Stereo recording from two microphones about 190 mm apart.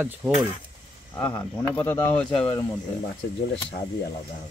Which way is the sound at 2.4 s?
25° left (ahead or behind).